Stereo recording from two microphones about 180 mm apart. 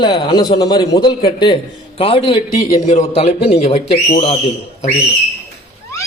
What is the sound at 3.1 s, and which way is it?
Speech, 35° left (ahead or behind).